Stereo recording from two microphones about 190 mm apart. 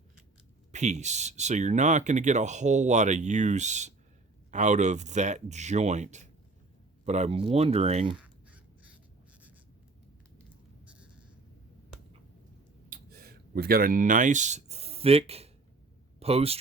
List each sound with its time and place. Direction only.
0.7 s speech: 40° right (ahead or behind)
8.2 s fowl: 5° right (ahead or behind)
12.9 s speech: 50° right (ahead or behind); by 16.6 s 30° right (ahead or behind)